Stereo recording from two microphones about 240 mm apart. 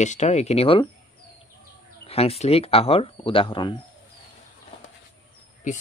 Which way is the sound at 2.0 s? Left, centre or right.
Left.